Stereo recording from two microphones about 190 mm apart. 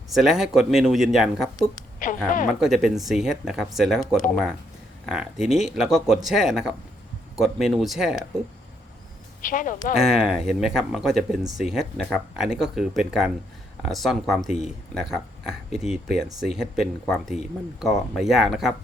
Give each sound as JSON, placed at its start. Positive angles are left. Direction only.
{"t": 0.1, "sound": "speech", "side_deg": 0}
{"t": 2.0, "sound": "a woman's voice", "side_deg": 45}
{"t": 2.5, "sound": "speech", "side_deg": 0}
{"t": 9.4, "sound": "a woman's voice", "side_deg": 45}
{"t": 10.1, "sound": "speech", "side_deg": -5}